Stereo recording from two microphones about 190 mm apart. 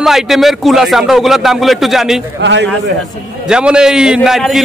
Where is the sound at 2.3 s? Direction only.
70° right (ahead or behind).